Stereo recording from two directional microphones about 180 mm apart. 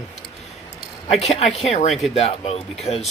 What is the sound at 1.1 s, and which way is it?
Speech, 35° left (ahead or behind).